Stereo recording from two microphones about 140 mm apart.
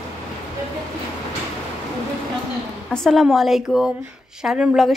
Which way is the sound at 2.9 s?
5° left (ahead or behind).